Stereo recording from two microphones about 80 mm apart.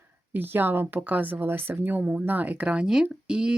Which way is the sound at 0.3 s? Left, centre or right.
Right.